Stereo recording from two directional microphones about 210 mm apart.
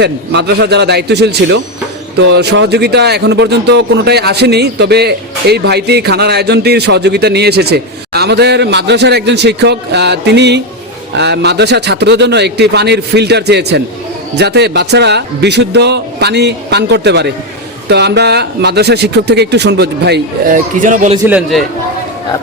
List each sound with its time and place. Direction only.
0.0 s speech: 50° right (ahead or behind)
20.8 s a man's voice: 35° right (ahead or behind)
21.2 s a man's voice: 5° right (ahead or behind)